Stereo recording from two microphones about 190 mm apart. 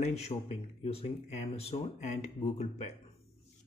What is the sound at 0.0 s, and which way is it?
Speech, 35° left (ahead or behind).